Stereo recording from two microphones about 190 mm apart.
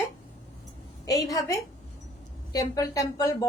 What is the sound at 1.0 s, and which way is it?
A woman's voice, 20° left (ahead or behind).